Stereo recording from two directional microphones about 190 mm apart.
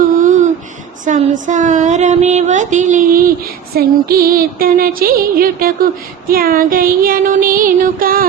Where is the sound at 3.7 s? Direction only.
50° right (ahead or behind).